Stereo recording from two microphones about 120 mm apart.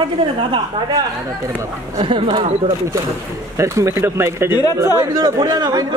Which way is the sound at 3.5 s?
25° right (ahead or behind).